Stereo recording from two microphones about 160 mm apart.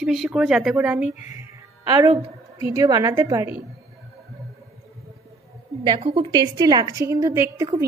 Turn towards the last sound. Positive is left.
turn(degrees=-20)  # may be behind; listen again after turning